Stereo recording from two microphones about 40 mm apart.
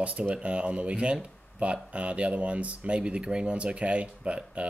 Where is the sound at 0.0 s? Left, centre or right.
Right.